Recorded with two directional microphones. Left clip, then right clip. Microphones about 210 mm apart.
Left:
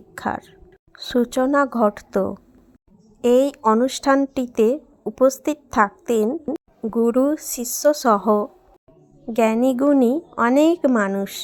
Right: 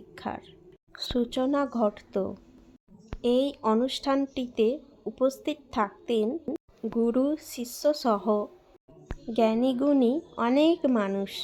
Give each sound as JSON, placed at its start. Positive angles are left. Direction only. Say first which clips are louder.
{"t": 0.1, "sound": "whispering", "louder": "left 10 dB", "side_deg": 25}
{"t": 1.1, "sound": "speech", "louder": "left 9 dB", "side_deg": 25}